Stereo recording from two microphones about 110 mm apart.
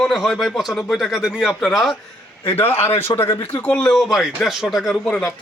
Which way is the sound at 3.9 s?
Centre (ahead or behind).